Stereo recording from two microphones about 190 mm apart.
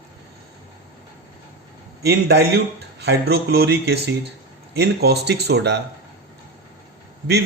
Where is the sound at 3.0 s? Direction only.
60° right (ahead or behind).